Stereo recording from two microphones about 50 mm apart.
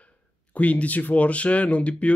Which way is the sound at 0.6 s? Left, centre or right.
Left.